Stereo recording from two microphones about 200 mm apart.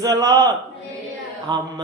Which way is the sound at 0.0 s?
15° right (ahead or behind).